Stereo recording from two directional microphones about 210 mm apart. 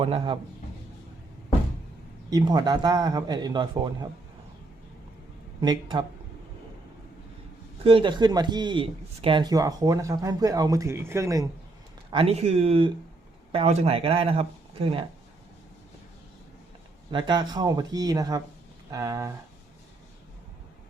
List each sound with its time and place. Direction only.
0.0 s speech: 25° right (ahead or behind)
2.3 s speech: 20° right (ahead or behind)
5.5 s speech: 20° right (ahead or behind)
7.9 s speech: 25° right (ahead or behind)
12.1 s speech: 30° right (ahead or behind)
17.1 s speech: 20° right (ahead or behind)